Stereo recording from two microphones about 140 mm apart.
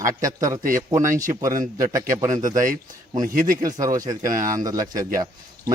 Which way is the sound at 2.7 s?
75° right (ahead or behind).